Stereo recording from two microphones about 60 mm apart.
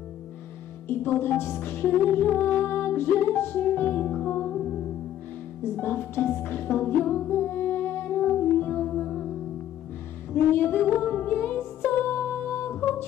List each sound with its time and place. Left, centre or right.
0.8 s music: left
4.4 s music: centre
5.8 s music: left
8.7 s music: centre
10.3 s female singing: left
11.0 s music: left